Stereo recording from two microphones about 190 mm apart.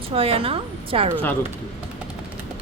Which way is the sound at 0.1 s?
30° right (ahead or behind).